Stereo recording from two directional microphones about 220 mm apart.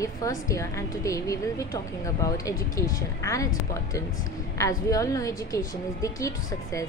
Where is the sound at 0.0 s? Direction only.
15° left (ahead or behind).